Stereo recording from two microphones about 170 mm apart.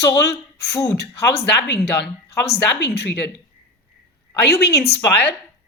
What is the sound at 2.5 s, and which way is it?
Speech, 80° left.